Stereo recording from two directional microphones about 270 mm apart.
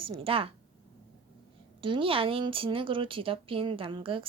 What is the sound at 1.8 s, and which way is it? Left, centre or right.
Speech, centre.